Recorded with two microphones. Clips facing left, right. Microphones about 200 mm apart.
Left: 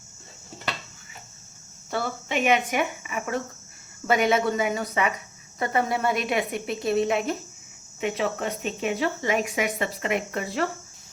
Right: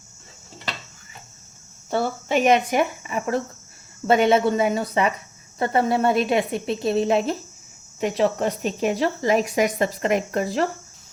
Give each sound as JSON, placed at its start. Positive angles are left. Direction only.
{"t": 1.9, "sound": "a woman's voice", "side_deg": -30}